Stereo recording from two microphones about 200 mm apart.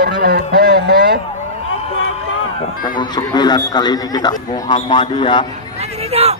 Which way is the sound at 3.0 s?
20° left (ahead or behind).